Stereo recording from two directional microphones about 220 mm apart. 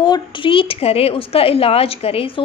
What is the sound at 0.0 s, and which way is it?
A woman's voice, 20° left (ahead or behind).